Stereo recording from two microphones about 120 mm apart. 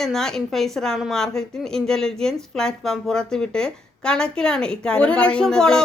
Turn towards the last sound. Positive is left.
turn(degrees=5)  # may be behind; listen again after turning